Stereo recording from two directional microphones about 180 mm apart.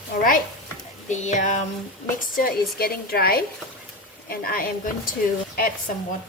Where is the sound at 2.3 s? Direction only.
55° left (ahead or behind).